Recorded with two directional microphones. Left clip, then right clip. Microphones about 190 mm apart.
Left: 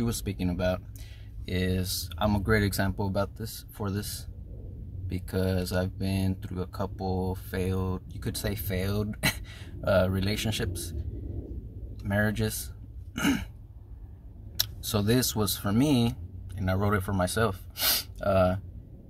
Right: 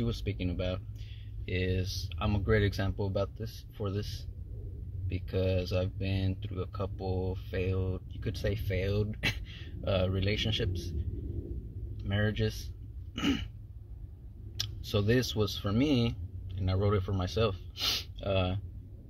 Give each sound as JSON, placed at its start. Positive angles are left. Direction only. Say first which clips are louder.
{"t": 0.0, "sound": "speech", "louder": "left 4 dB", "side_deg": 25}
{"t": 5.1, "sound": "speech", "louder": "left 1 dB", "side_deg": 20}
{"t": 12.1, "sound": "speech", "louder": "left 5 dB", "side_deg": 20}
{"t": 14.9, "sound": "speech", "louder": "left 1 dB", "side_deg": 20}